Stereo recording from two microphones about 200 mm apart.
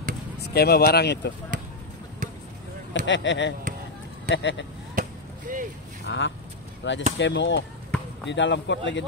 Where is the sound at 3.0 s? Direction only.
65° left (ahead or behind).